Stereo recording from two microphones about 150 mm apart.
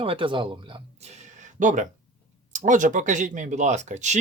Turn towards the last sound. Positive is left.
turn(degrees=-55)  # may be behind; listen again after turning